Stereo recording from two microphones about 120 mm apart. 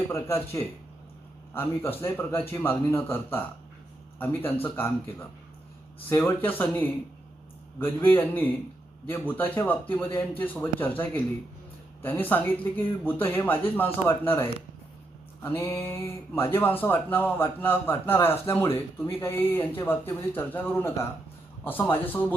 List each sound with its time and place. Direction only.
0.1 s a man's voice: 20° left (ahead or behind)
6.1 s speech: 20° left (ahead or behind)
15.4 s speech: 15° left (ahead or behind)